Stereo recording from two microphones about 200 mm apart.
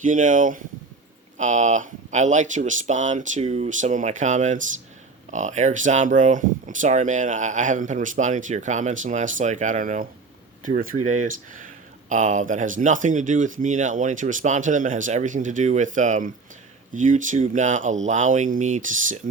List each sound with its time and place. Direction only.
0.0 s speech: 40° right (ahead or behind)